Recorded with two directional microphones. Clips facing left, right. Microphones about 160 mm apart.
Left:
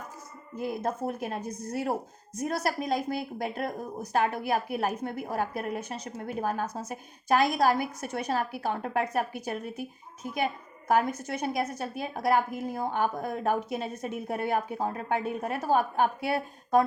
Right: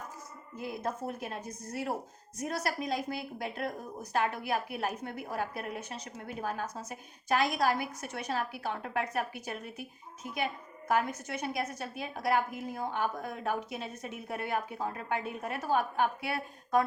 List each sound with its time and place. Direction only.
0.6 s a woman's voice: 50° left (ahead or behind)